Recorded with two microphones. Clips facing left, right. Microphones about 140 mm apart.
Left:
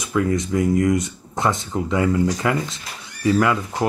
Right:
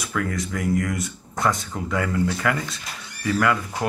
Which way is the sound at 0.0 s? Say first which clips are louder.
Left 6 dB; 20° left (ahead or behind).